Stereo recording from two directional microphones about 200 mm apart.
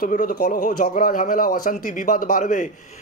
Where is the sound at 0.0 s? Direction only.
40° left (ahead or behind).